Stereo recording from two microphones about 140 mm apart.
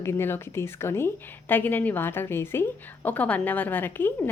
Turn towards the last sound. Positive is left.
turn(degrees=15)  # may be behind; listen again after turning